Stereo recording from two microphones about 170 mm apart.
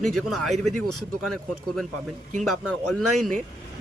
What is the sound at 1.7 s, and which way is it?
Speech, centre (ahead or behind).